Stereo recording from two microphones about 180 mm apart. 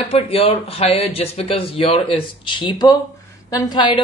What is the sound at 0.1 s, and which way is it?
Speech, 30° left (ahead or behind).